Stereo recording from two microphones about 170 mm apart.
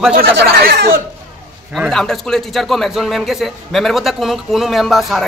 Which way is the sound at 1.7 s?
Centre (ahead or behind).